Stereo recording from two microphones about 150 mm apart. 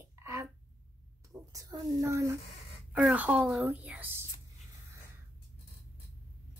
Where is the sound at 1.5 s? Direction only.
20° right (ahead or behind).